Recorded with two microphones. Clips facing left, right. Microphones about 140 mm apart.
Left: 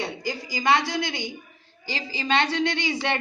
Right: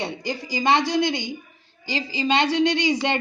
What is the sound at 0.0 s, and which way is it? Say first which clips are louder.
A woman's voice: right 2 dB; 20° right (ahead or behind).